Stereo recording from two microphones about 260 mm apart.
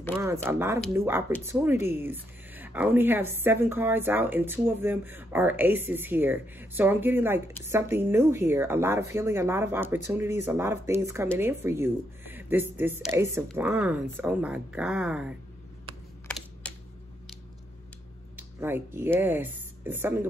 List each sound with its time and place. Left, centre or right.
0.5 s speech: centre
16.3 s typing: centre
18.3 s speech: centre